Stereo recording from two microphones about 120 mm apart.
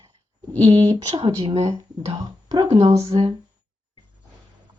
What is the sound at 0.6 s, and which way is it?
Speech, 45° right (ahead or behind).